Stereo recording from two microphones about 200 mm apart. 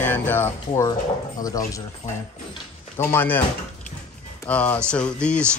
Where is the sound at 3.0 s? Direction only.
10° left (ahead or behind).